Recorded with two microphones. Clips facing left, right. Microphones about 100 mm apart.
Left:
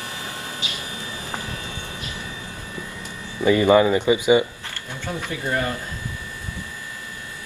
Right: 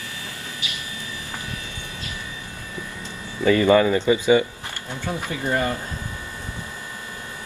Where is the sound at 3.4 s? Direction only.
20° left (ahead or behind).